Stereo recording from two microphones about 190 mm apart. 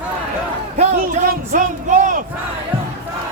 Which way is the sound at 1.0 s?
45° right (ahead or behind).